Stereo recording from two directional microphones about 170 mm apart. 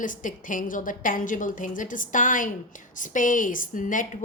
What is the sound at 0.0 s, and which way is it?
A woman's voice, 50° left (ahead or behind).